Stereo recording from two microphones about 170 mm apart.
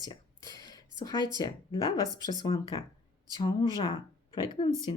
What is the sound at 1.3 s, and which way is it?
Speech, 25° left (ahead or behind).